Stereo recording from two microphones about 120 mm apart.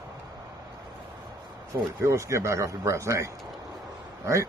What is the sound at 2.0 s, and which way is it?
Speech, 25° right (ahead or behind).